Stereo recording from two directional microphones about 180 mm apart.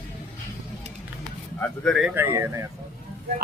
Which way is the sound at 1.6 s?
5° left (ahead or behind).